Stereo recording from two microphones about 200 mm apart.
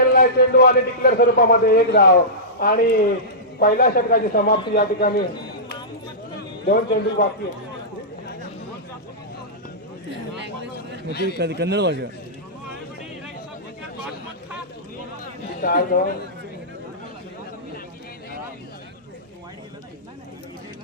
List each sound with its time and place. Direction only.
0.2 s a man's voice: 50° left (ahead or behind)
6.7 s a man's voice: 50° left (ahead or behind)
10.1 s a sound: 60° right (ahead or behind)
11.1 s a man's voice: 55° left (ahead or behind)
11.3 s speech: 55° right (ahead or behind)
15.6 s a man's voice: 50° left (ahead or behind)